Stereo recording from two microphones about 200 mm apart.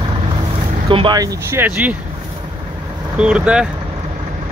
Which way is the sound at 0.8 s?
25° right (ahead or behind).